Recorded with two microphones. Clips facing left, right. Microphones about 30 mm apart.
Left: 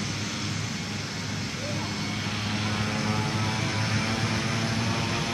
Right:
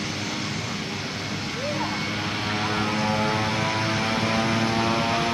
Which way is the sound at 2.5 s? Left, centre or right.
Right.